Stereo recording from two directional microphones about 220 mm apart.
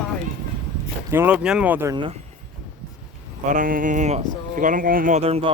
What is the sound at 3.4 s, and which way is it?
A man's voice, 35° right (ahead or behind).